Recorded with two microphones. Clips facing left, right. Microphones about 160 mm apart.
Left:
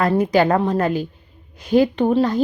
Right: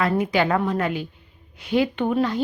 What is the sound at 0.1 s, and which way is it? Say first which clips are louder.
A woman's voice: left 5 dB; 40° left (ahead or behind).